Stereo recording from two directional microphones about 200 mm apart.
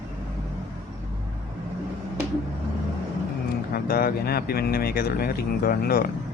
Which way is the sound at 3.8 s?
50° left (ahead or behind).